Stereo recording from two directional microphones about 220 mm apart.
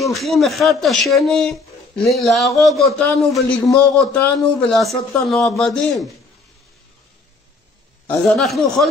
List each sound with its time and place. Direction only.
0.0 s speech: centre (ahead or behind)
8.1 s speech: centre (ahead or behind)